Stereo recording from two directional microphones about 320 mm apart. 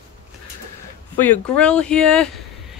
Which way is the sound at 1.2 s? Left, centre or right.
Centre.